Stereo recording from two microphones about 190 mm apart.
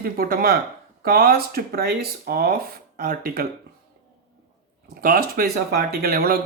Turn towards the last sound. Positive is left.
turn(degrees=-50)  # may be behind; listen again after turning